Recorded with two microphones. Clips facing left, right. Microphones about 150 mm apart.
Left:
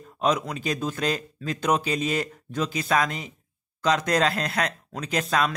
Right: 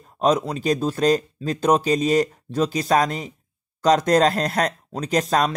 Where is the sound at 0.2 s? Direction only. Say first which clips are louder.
Right 5 dB; 35° right (ahead or behind).